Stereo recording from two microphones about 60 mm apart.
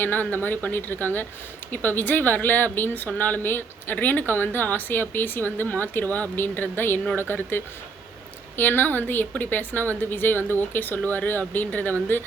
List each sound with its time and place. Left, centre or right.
0.0 s speech: left